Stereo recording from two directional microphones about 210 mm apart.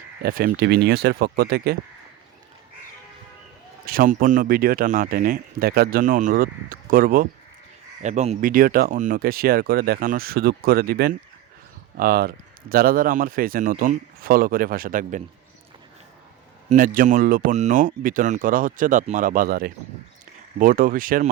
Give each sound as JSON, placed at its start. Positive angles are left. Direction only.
{"t": 0.2, "sound": "speech", "side_deg": -45}
{"t": 3.8, "sound": "speech", "side_deg": -40}
{"t": 16.6, "sound": "speech", "side_deg": -40}